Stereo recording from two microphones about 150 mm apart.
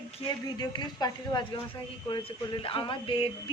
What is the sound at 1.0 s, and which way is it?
Speech, 25° left (ahead or behind).